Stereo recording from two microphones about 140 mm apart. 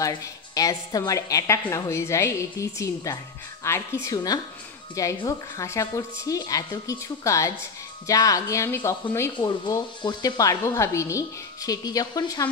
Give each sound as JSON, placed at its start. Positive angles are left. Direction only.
{"t": 0.0, "sound": "speech", "side_deg": 25}
{"t": 9.4, "sound": "speech", "side_deg": 30}